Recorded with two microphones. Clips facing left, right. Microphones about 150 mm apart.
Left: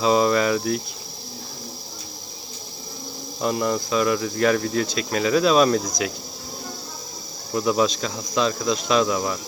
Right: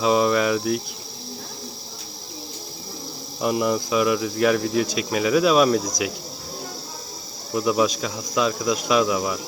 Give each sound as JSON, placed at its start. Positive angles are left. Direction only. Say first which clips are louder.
{"t": 0.0, "sound": "speech", "louder": "even", "side_deg": -5}
{"t": 3.4, "sound": "speech", "louder": "right 1 dB", "side_deg": -10}
{"t": 7.5, "sound": "speech", "louder": "even", "side_deg": -5}